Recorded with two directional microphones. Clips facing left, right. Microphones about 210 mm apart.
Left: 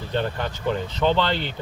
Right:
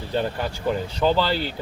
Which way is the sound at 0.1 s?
5° right (ahead or behind).